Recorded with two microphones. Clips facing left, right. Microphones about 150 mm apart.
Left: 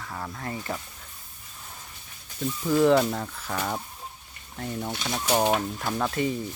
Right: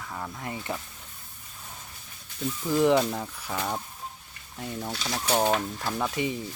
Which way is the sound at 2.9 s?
Centre (ahead or behind).